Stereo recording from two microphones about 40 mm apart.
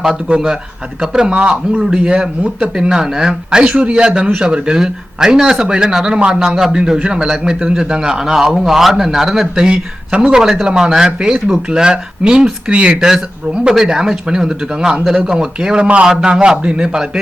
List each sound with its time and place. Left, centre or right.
0.0 s a man's voice: centre
3.6 s a man's voice: right; by 9.5 s centre
9.6 s a man's voice: right
13.0 s speech: centre
15.8 s a man's voice: right